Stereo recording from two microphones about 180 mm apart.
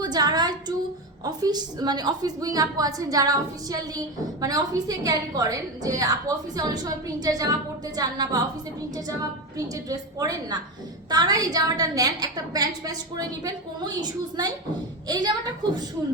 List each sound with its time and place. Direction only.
0.0 s a woman's voice: 20° right (ahead or behind)
9.6 s a woman's voice: 20° right (ahead or behind)